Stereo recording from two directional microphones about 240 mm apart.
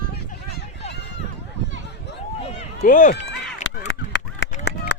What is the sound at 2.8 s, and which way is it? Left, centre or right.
Run, left.